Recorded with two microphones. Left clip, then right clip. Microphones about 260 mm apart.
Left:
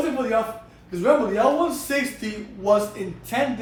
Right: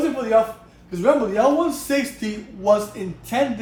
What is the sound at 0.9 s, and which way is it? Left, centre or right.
A man's voice, right.